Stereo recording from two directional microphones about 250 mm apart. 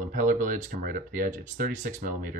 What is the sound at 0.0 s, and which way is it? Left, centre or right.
Speech, right.